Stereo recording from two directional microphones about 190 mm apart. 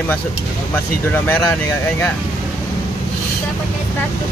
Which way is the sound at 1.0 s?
10° left (ahead or behind).